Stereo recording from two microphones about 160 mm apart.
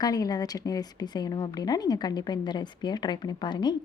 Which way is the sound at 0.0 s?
25° left (ahead or behind).